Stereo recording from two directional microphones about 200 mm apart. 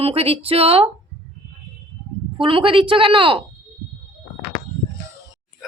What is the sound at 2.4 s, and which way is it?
Speech, 25° right (ahead or behind).